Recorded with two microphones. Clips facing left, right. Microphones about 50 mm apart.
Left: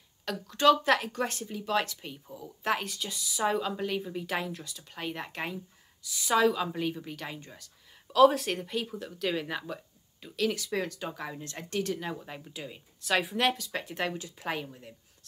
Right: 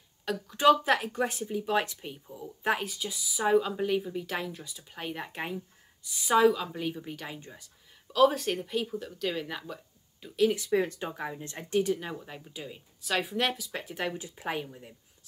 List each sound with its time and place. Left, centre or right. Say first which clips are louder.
0.2 s speech: right 1 dB; centre
6.5 s speech: left 1 dB; centre
7.3 s speech: even; centre
8.1 s speech: left 2 dB; centre
10.3 s speech: right 5 dB; right
11.1 s speech: right 1 dB; centre
14.1 s speech: right 1 dB; right
14.5 s speech: even; centre